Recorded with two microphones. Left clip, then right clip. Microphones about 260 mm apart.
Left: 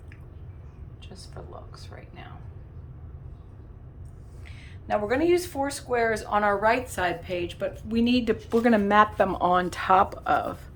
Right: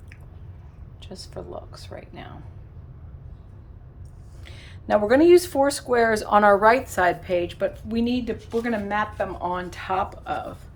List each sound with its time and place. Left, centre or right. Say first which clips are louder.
1.0 s speech: right 7 dB; right
4.4 s speech: right 5 dB; right; by 8.2 s centre
8.2 s speech: left 4 dB; centre
8.4 s speech: left 4 dB; left